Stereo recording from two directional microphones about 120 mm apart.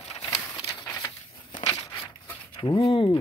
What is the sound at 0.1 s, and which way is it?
Horse, 60° left (ahead or behind).